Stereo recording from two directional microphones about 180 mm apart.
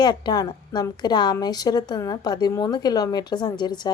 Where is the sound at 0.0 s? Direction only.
25° left (ahead or behind).